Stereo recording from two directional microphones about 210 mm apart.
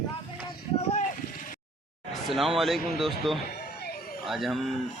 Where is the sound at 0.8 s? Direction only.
30° left (ahead or behind).